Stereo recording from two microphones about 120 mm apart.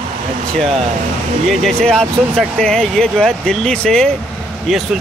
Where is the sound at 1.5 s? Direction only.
5° left (ahead or behind).